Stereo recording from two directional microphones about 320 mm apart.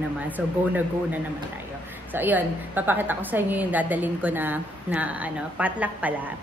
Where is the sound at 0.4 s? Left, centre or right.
Centre.